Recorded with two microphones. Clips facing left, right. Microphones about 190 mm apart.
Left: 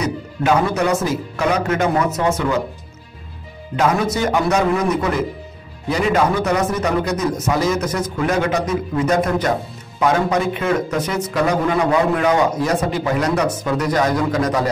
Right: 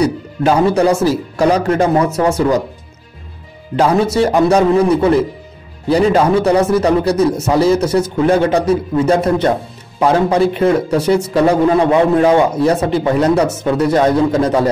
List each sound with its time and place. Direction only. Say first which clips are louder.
0.0 s a man's voice: right 6 dB; 35° right (ahead or behind)
3.7 s a man's voice: right 5 dB; 30° right (ahead or behind)